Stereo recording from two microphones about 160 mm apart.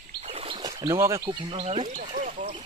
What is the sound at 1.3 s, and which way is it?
Speech, 35° right (ahead or behind).